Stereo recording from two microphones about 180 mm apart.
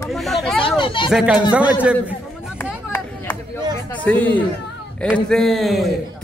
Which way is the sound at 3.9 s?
10° left (ahead or behind).